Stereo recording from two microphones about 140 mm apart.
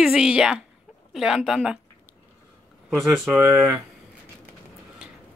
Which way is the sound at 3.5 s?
Centre (ahead or behind).